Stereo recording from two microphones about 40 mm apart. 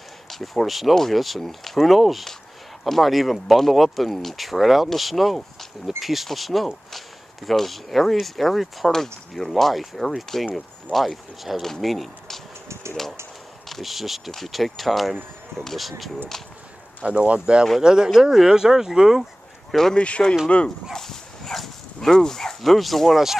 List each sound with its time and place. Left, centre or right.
0.3 s speech: centre
13.7 s speech: centre
17.0 s speech: right
18.1 s speech: centre
19.9 s speech: left
20.9 s dog: centre
22.1 s speech: centre
22.6 s speech: centre